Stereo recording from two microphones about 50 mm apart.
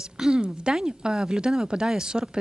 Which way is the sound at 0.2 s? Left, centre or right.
Centre.